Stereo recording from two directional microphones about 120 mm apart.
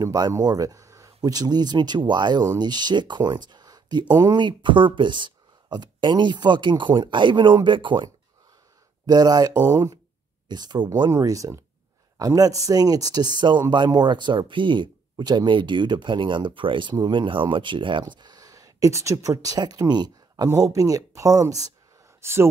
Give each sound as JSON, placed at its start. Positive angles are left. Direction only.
{"t": 0.0, "sound": "speech", "side_deg": -30}
{"t": 11.1, "sound": "speech", "side_deg": -25}